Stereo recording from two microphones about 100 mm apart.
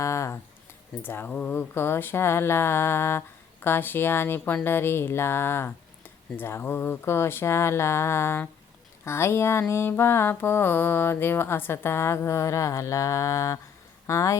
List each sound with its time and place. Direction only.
0.0 s a sound: 30° left (ahead or behind)
1.0 s mantra: 20° left (ahead or behind)
14.1 s speech: 30° left (ahead or behind)